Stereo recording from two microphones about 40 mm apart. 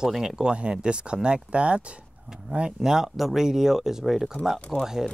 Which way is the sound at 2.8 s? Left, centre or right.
Centre.